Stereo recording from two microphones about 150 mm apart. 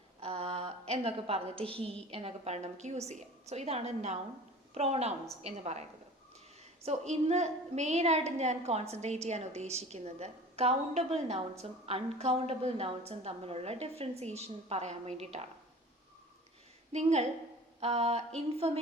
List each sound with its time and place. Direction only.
0.2 s a woman's voice: 40° right (ahead or behind)
6.8 s a woman's voice: 45° right (ahead or behind)
16.9 s a woman's voice: 50° right (ahead or behind)
17.7 s a sound: 45° right (ahead or behind)
18.3 s a woman's voice: 40° right (ahead or behind)